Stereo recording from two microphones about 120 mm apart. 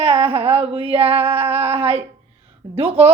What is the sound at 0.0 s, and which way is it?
Speech, 45° right (ahead or behind).